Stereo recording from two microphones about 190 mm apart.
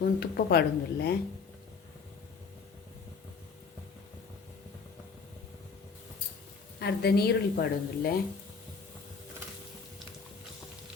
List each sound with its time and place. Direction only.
0.0 s a woman's voice: 55° left (ahead or behind)
6.7 s a woman's voice: 60° left (ahead or behind)